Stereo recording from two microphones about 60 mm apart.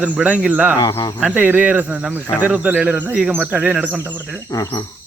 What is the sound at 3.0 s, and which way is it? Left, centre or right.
Cricket, right.